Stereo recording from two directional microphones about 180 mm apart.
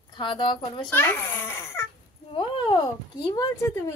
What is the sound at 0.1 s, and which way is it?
Speech, 25° left (ahead or behind).